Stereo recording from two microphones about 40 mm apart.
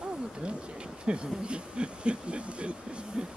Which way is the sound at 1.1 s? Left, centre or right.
Right.